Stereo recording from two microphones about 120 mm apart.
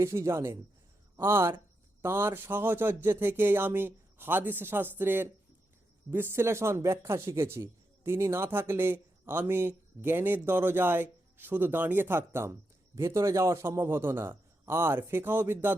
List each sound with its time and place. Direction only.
0.0 s speech: 20° right (ahead or behind)